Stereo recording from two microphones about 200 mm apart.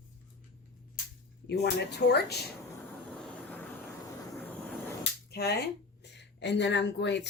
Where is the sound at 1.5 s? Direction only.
55° left (ahead or behind).